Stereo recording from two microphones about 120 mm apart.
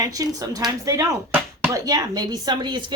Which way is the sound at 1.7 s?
30° right (ahead or behind).